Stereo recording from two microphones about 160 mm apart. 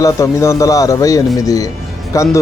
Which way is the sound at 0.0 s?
20° left (ahead or behind).